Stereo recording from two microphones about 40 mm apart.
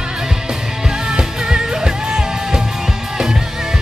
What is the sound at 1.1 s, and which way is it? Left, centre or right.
Music, centre.